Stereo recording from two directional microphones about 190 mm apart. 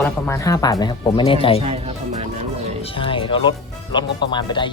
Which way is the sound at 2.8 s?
30° left (ahead or behind).